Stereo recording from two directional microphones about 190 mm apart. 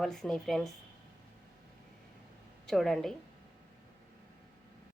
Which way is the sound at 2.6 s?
Centre (ahead or behind).